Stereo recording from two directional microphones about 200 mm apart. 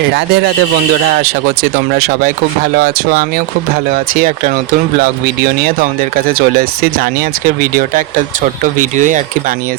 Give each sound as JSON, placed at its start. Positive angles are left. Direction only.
{"t": 2.0, "sound": "speech", "side_deg": -50}
{"t": 6.2, "sound": "speech", "side_deg": -50}